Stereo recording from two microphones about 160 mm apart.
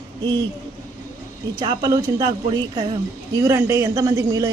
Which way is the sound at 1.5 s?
25° right (ahead or behind).